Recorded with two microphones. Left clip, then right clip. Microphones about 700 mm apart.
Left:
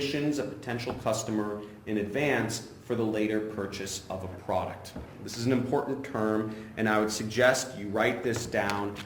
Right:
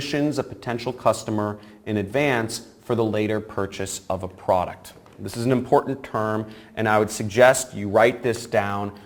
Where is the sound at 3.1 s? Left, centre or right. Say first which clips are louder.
Right 5 dB; right.